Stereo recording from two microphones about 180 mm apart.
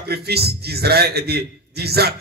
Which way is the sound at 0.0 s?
60° right (ahead or behind).